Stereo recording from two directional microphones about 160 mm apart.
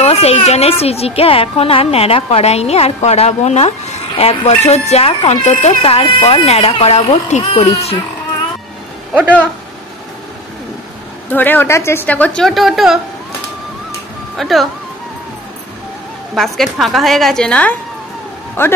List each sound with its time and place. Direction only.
0.0 s a woman's voice: 40° left (ahead or behind)
11.2 s a woman's voice: 10° left (ahead or behind)
14.3 s speech: centre (ahead or behind)
16.3 s a woman's voice: centre (ahead or behind)